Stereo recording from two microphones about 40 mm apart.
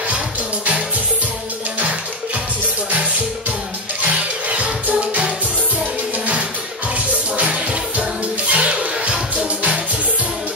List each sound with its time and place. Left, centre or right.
4.5 s music: right
7.3 s music: right